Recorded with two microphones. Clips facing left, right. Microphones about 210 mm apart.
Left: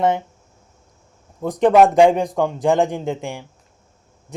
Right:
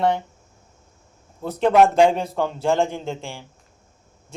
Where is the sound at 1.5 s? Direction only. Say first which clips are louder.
Left 3 dB; 15° left (ahead or behind).